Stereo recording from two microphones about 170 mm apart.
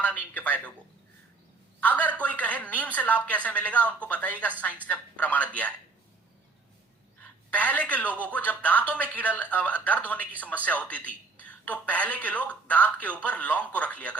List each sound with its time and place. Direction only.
0.0 s speech: 10° left (ahead or behind)
1.8 s speech: 10° left (ahead or behind)
7.2 s a woman's voice: 10° left (ahead or behind)